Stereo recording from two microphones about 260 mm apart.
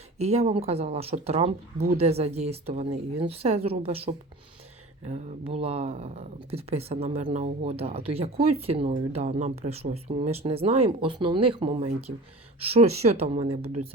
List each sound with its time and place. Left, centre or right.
0.2 s speech: right